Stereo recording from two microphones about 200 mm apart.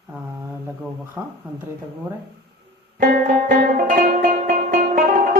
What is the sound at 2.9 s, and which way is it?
Music, 45° right (ahead or behind).